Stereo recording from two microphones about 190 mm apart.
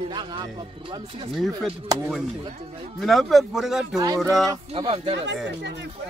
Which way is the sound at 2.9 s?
Centre (ahead or behind).